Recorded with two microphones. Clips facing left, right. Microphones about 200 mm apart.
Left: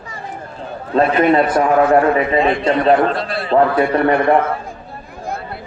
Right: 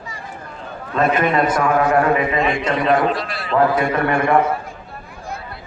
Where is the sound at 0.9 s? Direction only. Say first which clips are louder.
Left 4 dB; 35° left (ahead or behind).